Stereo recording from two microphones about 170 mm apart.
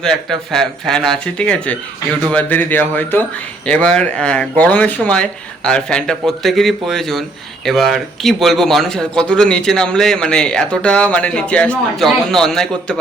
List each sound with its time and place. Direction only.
0.0 s speech: 5° left (ahead or behind)